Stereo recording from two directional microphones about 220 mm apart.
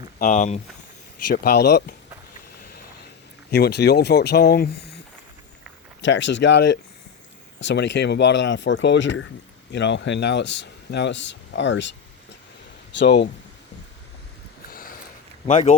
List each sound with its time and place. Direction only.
0.2 s speech: 35° left (ahead or behind)
1.3 s speech: 45° left (ahead or behind)
3.5 s speech: 50° left (ahead or behind)
6.0 s speech: 55° left (ahead or behind)
14.7 s sniff: 40° left (ahead or behind)
15.4 s speech: 35° left (ahead or behind)